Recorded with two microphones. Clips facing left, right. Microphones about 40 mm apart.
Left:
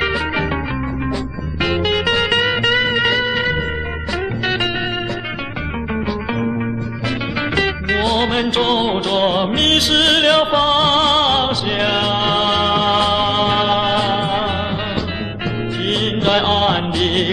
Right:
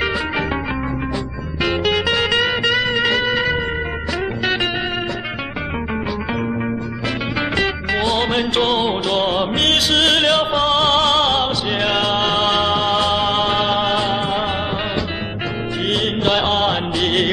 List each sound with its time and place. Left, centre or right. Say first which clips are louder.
2.1 s music: left 1 dB; centre
8.0 s music: left 1 dB; centre
11.7 s music: even; centre
12.6 s music: left 2 dB; left
13.0 s music: left 1 dB; centre
15.9 s music: left 1 dB; centre
16.4 s music: left 2 dB; centre
17.0 s music: right 1 dB; centre